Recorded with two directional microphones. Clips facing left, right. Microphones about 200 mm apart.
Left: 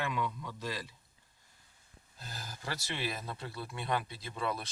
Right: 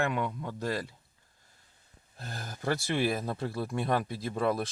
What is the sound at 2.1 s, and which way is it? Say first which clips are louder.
Speech: right 5 dB; 55° right (ahead or behind).